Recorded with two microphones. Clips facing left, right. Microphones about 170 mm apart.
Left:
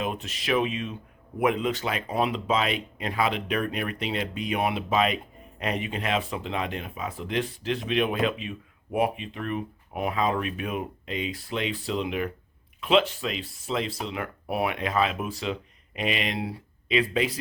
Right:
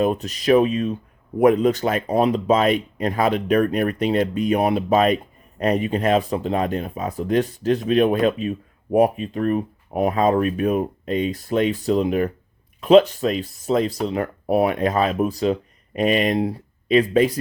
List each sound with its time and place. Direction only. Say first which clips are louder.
0.0 s speech: right 10 dB; 40° right (ahead or behind)